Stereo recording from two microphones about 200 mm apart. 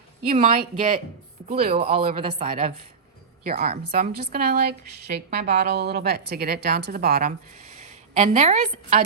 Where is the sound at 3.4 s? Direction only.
50° right (ahead or behind).